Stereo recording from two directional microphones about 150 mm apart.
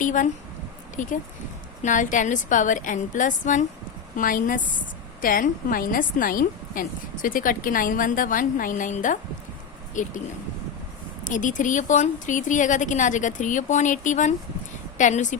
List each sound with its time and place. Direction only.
0.0 s a woman's voice: 60° left (ahead or behind)
11.2 s a woman's voice: 60° left (ahead or behind)